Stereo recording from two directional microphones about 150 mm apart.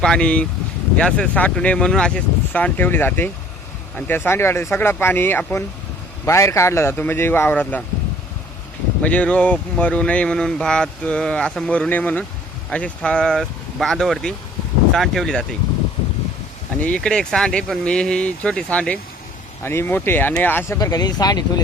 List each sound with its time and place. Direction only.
0.0 s speech: 5° left (ahead or behind)
9.0 s speech: 10° left (ahead or behind)
16.8 s speech: 5° left (ahead or behind)
20.7 s speech: 25° left (ahead or behind)